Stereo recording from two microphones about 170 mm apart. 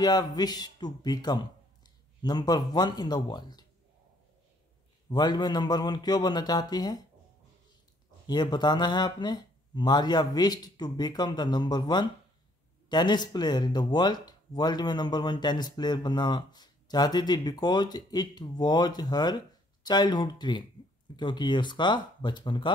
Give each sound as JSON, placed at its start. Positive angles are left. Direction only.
{"t": 0.0, "sound": "speech", "side_deg": 25}
{"t": 5.1, "sound": "speech", "side_deg": 25}
{"t": 8.3, "sound": "speech", "side_deg": 25}